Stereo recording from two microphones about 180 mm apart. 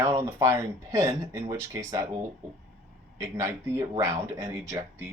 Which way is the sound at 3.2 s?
15° right (ahead or behind).